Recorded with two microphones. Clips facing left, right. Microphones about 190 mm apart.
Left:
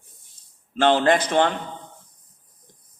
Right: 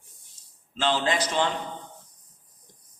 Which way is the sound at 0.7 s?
55° left (ahead or behind).